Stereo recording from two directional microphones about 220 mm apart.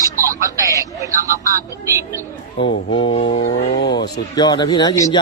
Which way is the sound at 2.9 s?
25° left (ahead or behind).